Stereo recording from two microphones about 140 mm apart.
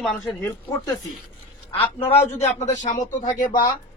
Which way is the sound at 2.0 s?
50° left (ahead or behind).